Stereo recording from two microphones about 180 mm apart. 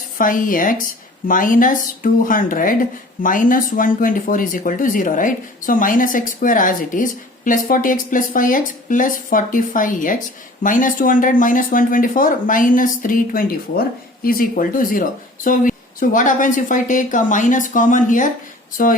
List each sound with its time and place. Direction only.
0.2 s speech: 50° left (ahead or behind)